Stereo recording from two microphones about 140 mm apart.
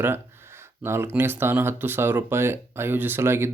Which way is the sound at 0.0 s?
15° right (ahead or behind).